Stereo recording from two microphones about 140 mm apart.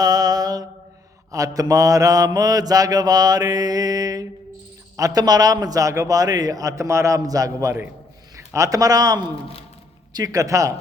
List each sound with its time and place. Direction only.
0.0 s mantra: 25° right (ahead or behind)
8.4 s speech: 20° right (ahead or behind)
10.1 s mantra: 25° right (ahead or behind)